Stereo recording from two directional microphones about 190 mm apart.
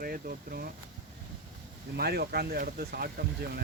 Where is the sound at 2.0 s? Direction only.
55° right (ahead or behind).